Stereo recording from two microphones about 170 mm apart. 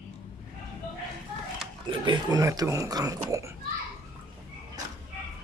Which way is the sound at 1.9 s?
25° right (ahead or behind).